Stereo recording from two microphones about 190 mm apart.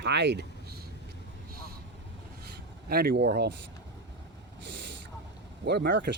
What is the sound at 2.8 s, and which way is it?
Speech, 55° right (ahead or behind).